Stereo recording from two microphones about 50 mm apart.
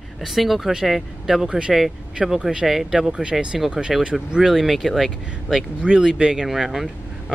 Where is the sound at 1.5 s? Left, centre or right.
Centre.